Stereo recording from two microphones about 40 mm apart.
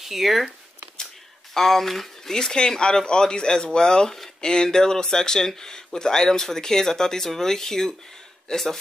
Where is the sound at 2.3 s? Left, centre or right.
Centre.